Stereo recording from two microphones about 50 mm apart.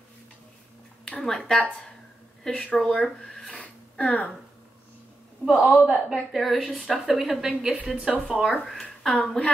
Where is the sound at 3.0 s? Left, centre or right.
Centre.